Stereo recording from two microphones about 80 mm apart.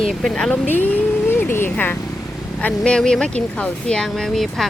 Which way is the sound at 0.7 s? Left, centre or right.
Left.